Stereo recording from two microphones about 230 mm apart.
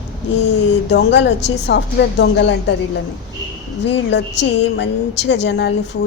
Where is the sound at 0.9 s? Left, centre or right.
Left.